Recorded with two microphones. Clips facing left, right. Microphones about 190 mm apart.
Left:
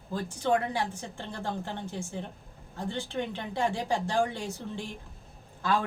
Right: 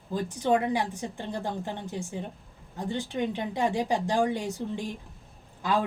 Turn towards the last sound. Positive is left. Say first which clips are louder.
# right 1 dB
turn(degrees=-15)  # may be behind; listen again after turning